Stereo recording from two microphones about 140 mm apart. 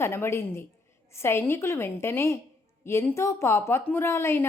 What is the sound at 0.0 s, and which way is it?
A woman's voice, 15° left (ahead or behind).